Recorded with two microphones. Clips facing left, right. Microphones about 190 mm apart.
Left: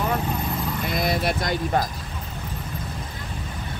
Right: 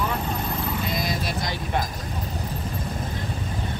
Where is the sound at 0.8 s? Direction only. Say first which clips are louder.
Left 4 dB; 60° left (ahead or behind).